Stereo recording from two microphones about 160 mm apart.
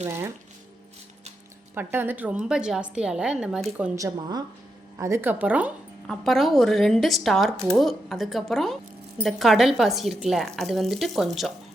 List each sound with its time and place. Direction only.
1.7 s speech: 15° right (ahead or behind)
3.9 s a woman's voice: 25° right (ahead or behind)
6.1 s speech: centre (ahead or behind)